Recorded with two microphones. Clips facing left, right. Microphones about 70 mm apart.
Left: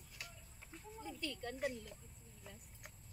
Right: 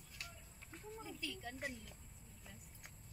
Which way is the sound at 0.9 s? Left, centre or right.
Centre.